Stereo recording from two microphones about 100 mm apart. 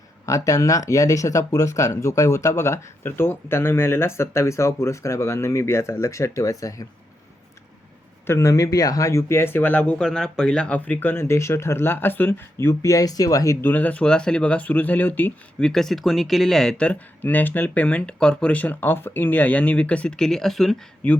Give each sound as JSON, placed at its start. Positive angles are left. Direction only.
{"t": 0.3, "sound": "speech", "side_deg": 35}
{"t": 8.3, "sound": "speech", "side_deg": 30}
{"t": 15.6, "sound": "speech", "side_deg": 5}